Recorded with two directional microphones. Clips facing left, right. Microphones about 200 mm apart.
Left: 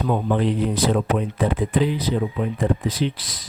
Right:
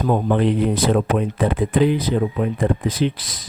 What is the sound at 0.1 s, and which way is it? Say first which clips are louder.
Speech: right 3 dB; 60° right (ahead or behind).